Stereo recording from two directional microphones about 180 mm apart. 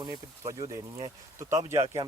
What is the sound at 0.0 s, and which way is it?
Speech, 20° right (ahead or behind).